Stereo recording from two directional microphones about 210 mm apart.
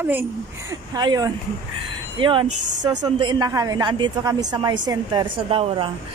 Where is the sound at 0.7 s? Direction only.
20° right (ahead or behind).